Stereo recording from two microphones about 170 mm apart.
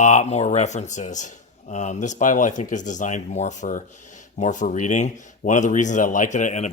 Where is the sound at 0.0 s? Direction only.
45° left (ahead or behind).